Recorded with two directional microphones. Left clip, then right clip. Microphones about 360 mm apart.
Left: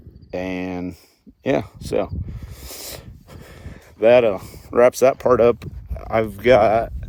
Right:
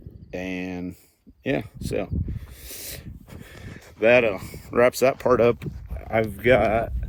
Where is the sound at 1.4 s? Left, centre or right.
Centre.